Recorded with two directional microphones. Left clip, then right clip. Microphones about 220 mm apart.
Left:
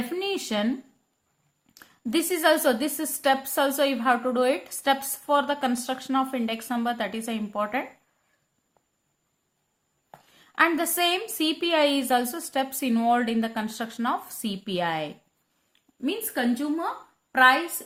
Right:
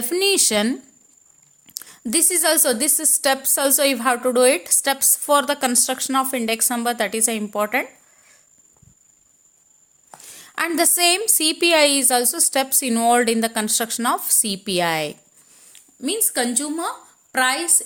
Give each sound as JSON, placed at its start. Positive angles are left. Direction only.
{"t": 0.1, "sound": "a woman's voice", "side_deg": -40}
{"t": 10.3, "sound": "a woman's voice", "side_deg": -40}